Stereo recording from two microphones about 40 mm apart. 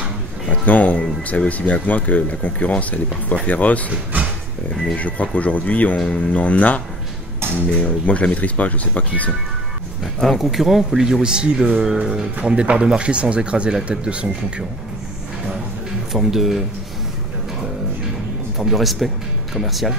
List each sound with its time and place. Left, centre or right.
0.5 s speech: left
4.9 s speech: left
10.4 s speech: centre
12.4 s speech: right
16.1 s speech: centre
18.6 s speech: centre